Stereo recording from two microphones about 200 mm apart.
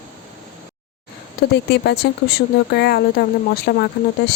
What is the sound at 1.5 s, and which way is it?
Speech, 55° left (ahead or behind).